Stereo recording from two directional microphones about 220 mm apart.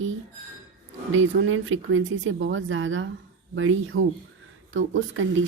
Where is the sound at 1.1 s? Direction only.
60° right (ahead or behind).